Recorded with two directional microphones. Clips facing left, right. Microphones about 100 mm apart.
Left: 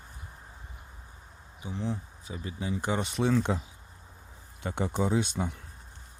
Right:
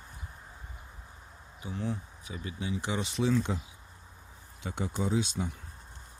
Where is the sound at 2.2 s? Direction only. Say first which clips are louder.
Left 2 dB; 35° left (ahead or behind); by 3.6 s 60° left (ahead or behind).